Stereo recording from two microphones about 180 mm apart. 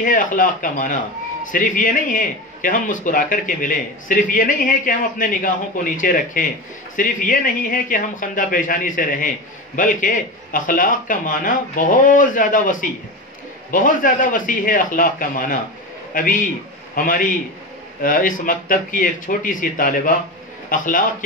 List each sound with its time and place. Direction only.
0.0 s a man's voice: 50° left (ahead or behind)